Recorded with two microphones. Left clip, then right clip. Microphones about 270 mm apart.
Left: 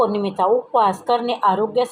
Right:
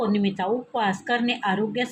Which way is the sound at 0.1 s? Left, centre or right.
Left.